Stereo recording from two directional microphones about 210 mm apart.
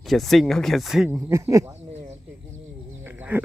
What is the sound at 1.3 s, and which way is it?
Speech, 15° right (ahead or behind).